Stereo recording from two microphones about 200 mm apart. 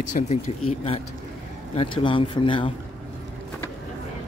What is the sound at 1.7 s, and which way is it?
Speech, 25° left (ahead or behind).